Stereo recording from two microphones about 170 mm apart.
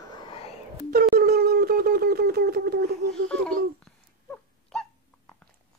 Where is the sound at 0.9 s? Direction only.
65° right (ahead or behind).